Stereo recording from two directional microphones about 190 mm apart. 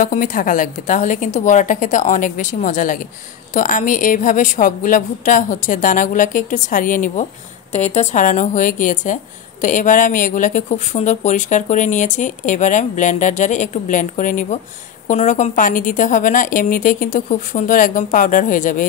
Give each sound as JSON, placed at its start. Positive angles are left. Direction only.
{"t": 0.0, "sound": "a woman's voice", "side_deg": 45}